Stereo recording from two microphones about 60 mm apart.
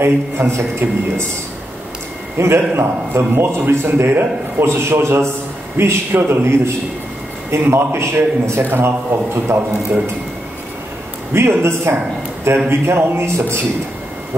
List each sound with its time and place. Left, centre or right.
0.0 s a man's voice: right
2.3 s a man's voice: right
4.6 s a man's voice: right
6.4 s a man's voice: right
7.7 s a man's voice: right
11.3 s a man's voice: right